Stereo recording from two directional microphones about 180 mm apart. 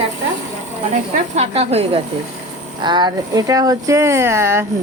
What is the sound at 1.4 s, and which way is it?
Speech, 35° right (ahead or behind).